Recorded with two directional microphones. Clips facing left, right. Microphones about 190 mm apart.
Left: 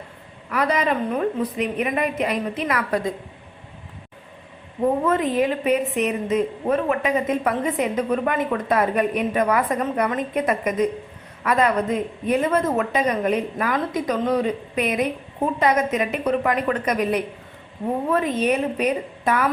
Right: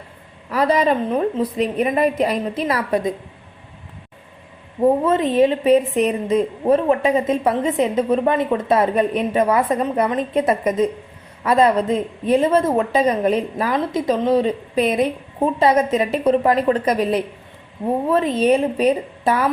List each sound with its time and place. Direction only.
0.5 s a woman's voice: 30° right (ahead or behind)
5.0 s a woman's voice: 25° right (ahead or behind)